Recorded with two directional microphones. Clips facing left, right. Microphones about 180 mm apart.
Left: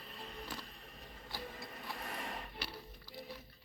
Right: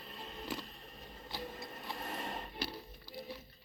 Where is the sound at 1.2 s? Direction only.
20° right (ahead or behind).